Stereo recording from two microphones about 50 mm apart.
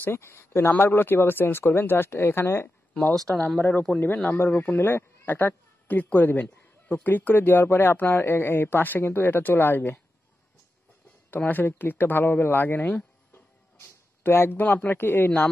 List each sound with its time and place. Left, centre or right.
0.0 s speech: left
3.3 s speech: left
5.2 s a woman's voice: left
11.2 s speech: left
13.7 s a sound: left
14.6 s speech: left